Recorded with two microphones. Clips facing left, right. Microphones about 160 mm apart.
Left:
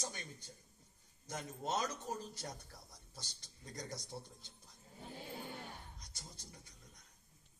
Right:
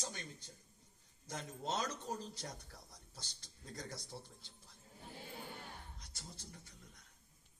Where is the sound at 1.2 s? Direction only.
10° left (ahead or behind).